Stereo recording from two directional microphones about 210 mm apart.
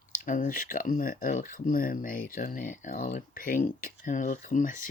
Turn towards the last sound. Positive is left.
turn(degrees=40)  # may be behind; listen again after turning